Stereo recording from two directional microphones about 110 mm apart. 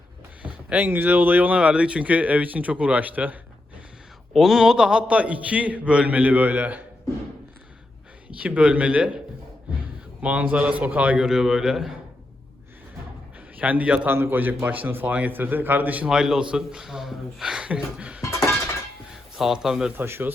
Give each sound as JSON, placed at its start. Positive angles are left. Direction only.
{"t": 0.4, "sound": "a man's voice", "side_deg": -15}
{"t": 4.4, "sound": "a man's voice", "side_deg": -5}
{"t": 8.3, "sound": "a man's voice", "side_deg": -10}
{"t": 13.6, "sound": "a man's voice", "side_deg": -15}
{"t": 18.2, "sound": "music", "side_deg": 25}
{"t": 19.1, "sound": "speech", "side_deg": -5}
{"t": 20.0, "sound": "a man's voice", "side_deg": -20}